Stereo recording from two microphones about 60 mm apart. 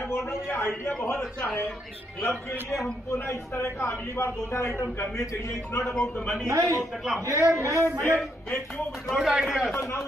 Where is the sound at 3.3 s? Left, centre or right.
Left.